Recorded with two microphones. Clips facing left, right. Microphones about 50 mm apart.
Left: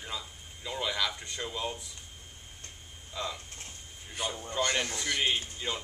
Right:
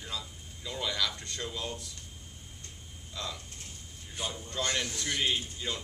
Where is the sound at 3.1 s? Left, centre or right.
Centre.